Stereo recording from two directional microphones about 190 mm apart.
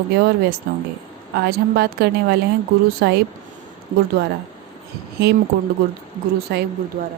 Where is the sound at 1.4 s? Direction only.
55° right (ahead or behind).